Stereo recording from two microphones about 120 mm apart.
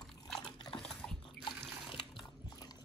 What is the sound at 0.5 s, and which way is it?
Liquid, 40° left (ahead or behind).